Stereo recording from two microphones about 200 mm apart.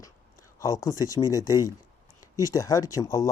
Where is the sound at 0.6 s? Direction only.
15° left (ahead or behind).